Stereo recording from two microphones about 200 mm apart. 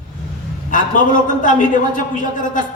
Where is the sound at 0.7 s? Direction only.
40° left (ahead or behind).